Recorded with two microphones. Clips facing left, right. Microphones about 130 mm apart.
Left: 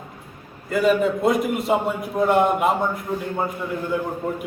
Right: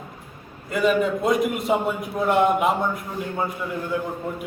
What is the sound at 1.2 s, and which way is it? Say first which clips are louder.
A man's voice: left 1 dB; centre (ahead or behind).